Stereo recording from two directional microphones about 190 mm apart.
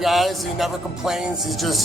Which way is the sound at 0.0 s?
Centre (ahead or behind).